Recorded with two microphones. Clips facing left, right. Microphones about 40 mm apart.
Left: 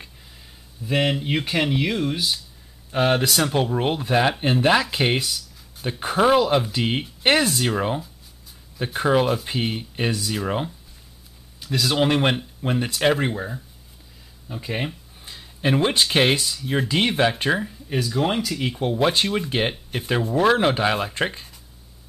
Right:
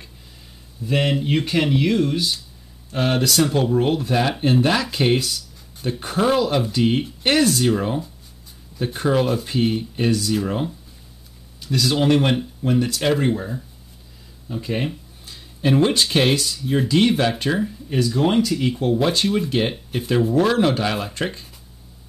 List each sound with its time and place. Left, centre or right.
0.8 s speech: centre
16.5 s speech: centre
16.8 s speech: centre